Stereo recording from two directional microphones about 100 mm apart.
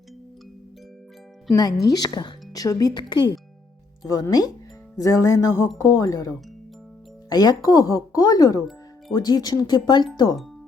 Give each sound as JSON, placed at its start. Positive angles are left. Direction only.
{"t": 1.5, "sound": "speech", "side_deg": 35}